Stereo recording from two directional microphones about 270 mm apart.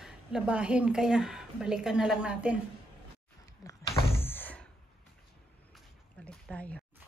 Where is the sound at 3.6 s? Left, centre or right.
Centre.